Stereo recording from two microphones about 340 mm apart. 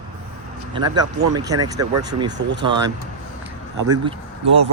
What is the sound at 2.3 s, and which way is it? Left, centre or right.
Speech, right.